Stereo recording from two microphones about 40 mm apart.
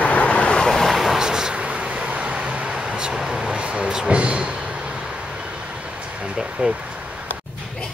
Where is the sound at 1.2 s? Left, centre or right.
Centre.